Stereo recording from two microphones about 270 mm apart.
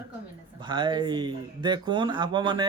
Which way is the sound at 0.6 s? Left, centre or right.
Centre.